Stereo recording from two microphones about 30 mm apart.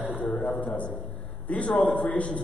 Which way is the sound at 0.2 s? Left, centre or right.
Left.